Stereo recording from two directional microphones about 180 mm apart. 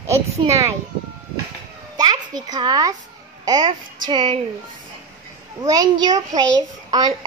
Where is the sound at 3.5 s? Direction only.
20° right (ahead or behind).